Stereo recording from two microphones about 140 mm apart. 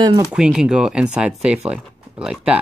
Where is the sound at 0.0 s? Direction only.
30° right (ahead or behind).